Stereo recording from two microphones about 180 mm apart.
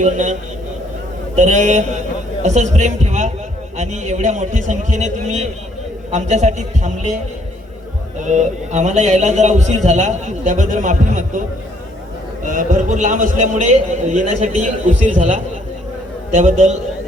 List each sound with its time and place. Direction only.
0.0 s a man's voice: 45° right (ahead or behind)
1.4 s a man's voice: 40° right (ahead or behind)
8.2 s a man's voice: 40° right (ahead or behind)
12.5 s a man's voice: 45° right (ahead or behind)